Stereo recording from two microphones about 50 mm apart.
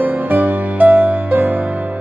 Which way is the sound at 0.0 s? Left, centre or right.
Right.